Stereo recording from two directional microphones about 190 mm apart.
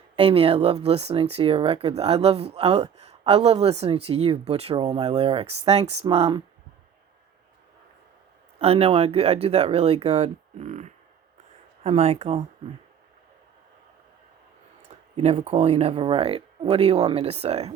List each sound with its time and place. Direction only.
0.2 s speech: 30° right (ahead or behind)
8.5 s speech: 30° right (ahead or behind)
15.1 s speech: 30° right (ahead or behind)